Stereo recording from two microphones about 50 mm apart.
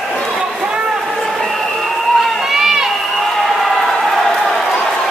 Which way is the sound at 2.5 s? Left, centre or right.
Centre.